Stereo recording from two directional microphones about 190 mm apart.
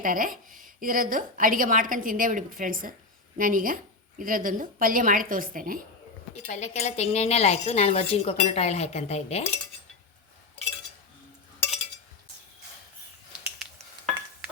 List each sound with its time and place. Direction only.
0.0 s a woman's voice: 45° right (ahead or behind)
6.4 s a woman's voice: 40° left (ahead or behind)